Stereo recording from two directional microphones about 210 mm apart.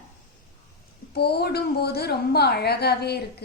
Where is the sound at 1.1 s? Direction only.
50° left (ahead or behind).